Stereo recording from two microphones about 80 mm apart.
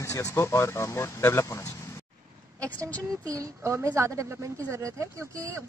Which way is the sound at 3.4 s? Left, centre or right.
Right.